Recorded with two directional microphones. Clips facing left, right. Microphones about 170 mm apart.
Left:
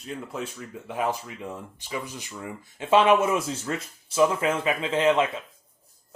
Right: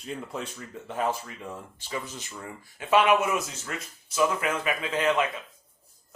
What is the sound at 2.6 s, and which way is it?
Speech, 25° left (ahead or behind).